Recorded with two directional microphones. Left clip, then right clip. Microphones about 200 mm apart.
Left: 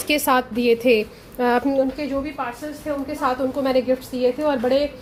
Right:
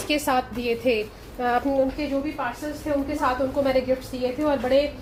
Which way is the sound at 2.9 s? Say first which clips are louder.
Left 1 dB; 55° left (ahead or behind).